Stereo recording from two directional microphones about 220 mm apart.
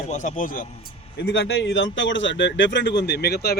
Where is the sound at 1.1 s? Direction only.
50° left (ahead or behind).